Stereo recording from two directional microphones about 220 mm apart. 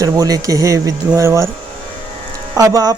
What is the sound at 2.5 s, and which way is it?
Speech, 15° right (ahead or behind).